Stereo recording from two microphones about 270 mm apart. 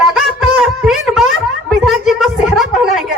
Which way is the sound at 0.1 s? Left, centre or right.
Centre.